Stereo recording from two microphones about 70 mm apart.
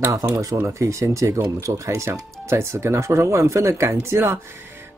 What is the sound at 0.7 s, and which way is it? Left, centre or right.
Speech, right.